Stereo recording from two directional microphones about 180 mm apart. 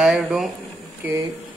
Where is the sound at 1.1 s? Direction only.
20° right (ahead or behind).